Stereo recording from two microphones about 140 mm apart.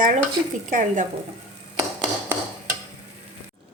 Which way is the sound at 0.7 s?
65° right (ahead or behind).